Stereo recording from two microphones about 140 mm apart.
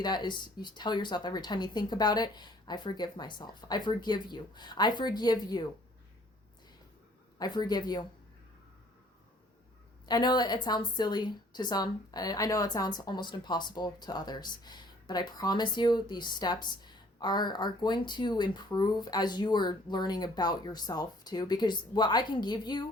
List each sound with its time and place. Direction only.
0.0 s a woman's voice: 30° left (ahead or behind)
7.3 s speech: 30° left (ahead or behind)
10.1 s a woman's voice: 30° left (ahead or behind)